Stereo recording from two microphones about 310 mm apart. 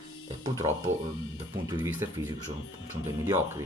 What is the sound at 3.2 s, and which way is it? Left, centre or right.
Speech, centre.